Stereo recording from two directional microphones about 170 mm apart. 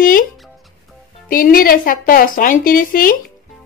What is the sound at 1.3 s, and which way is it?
Speech, 55° left (ahead or behind).